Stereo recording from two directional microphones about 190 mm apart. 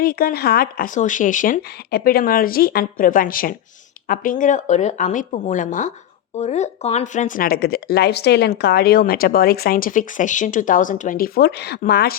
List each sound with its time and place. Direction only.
0.0 s a woman's voice: 50° left (ahead or behind)